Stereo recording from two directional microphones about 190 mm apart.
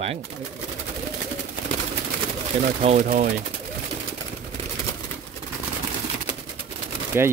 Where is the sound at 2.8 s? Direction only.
45° right (ahead or behind).